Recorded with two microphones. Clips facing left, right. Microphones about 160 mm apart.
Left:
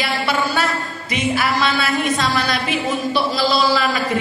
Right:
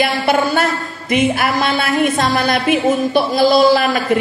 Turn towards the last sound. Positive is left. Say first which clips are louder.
# right 6 dB
turn(degrees=-55)  # may be behind; listen again after turning